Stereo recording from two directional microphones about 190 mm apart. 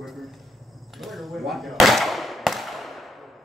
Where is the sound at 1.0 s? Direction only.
Centre (ahead or behind).